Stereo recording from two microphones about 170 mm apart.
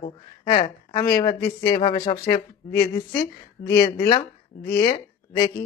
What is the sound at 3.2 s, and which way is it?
Speech, 65° left (ahead or behind).